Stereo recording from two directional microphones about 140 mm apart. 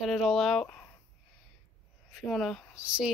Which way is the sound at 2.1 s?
Centre (ahead or behind).